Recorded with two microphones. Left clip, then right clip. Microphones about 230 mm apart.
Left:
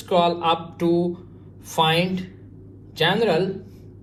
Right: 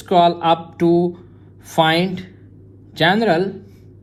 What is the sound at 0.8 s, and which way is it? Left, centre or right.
Speech, right.